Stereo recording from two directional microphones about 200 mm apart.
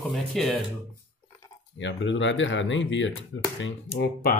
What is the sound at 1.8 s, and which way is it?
Speech, 65° left (ahead or behind).